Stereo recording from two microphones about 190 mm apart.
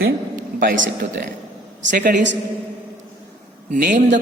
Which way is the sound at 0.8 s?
70° right (ahead or behind).